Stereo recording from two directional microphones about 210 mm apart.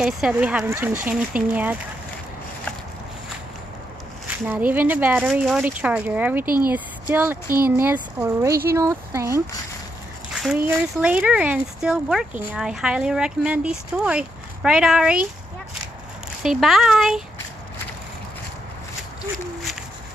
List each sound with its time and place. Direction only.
0.0 s speech: 5° right (ahead or behind)
4.3 s speech: 10° right (ahead or behind)
6.4 s speech: 45° right (ahead or behind)
6.7 s speech: 10° right (ahead or behind)
10.3 s speech: 5° right (ahead or behind)
16.4 s speech: centre (ahead or behind)